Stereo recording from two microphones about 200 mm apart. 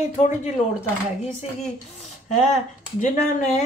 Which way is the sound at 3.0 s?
35° left (ahead or behind).